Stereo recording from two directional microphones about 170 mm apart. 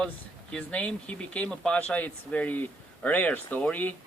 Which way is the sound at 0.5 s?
10° left (ahead or behind).